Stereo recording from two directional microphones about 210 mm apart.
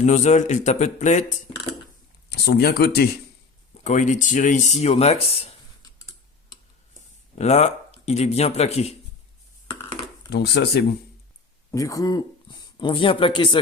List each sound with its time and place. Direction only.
0.0 s speech: 35° left (ahead or behind)
2.3 s speech: 50° left (ahead or behind)
3.8 s speech: 35° left (ahead or behind)
7.3 s speech: 30° left (ahead or behind)
10.2 s speech: 50° left (ahead or behind)
11.7 s speech: 15° left (ahead or behind)